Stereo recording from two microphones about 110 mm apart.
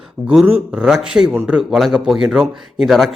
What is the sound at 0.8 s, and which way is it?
Speech, 5° right (ahead or behind).